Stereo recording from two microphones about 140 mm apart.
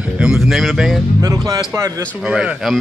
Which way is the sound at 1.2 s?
25° right (ahead or behind).